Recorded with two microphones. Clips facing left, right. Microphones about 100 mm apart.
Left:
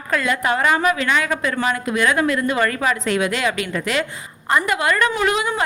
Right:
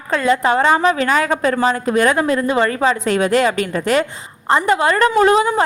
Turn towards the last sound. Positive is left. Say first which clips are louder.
# right 7 dB
turn(degrees=-35)  # may be behind; listen again after turning